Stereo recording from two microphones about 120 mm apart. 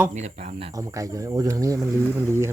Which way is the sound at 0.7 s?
30° right (ahead or behind).